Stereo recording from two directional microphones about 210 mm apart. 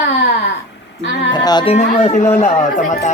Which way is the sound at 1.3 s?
20° left (ahead or behind).